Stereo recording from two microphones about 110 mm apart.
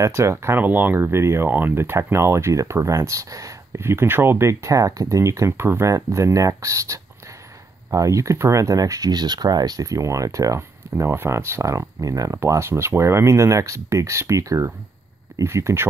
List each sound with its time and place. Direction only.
0.0 s speech: 25° right (ahead or behind)